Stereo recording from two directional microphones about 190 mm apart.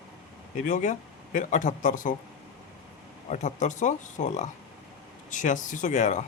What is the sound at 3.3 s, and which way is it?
Speech, 40° left (ahead or behind).